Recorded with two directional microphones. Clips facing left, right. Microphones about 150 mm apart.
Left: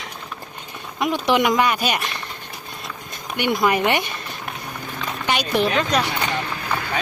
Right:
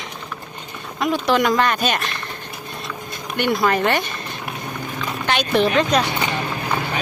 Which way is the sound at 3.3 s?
15° left (ahead or behind).